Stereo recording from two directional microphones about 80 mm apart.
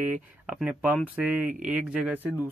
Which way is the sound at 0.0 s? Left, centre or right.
Centre.